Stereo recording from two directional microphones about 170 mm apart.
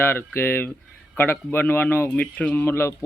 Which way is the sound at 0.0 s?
15° left (ahead or behind).